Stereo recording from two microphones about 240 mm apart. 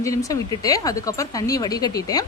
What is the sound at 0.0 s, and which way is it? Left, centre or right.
Speech, centre.